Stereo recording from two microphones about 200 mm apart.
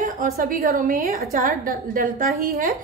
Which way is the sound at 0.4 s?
45° right (ahead or behind).